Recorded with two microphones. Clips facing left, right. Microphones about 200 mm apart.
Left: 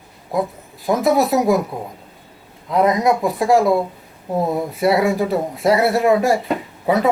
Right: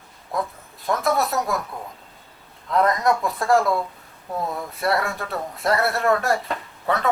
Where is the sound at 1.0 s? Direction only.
Centre (ahead or behind).